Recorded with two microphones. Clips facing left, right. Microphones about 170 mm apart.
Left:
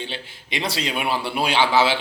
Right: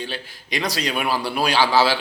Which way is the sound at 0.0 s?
25° left (ahead or behind).